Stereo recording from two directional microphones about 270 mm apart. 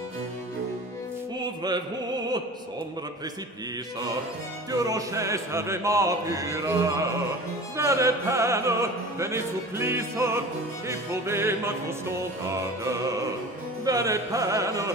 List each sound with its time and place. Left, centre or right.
1.6 s music: centre
4.6 s music: centre